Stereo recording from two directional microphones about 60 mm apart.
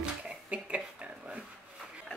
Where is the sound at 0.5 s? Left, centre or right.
Centre.